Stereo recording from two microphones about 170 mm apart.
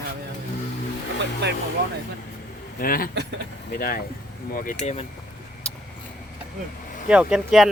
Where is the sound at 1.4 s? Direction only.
90° right.